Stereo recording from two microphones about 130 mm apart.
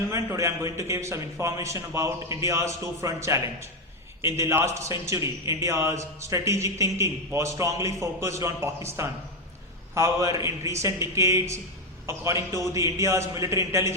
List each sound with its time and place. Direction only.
0.1 s a man's voice: 25° right (ahead or behind)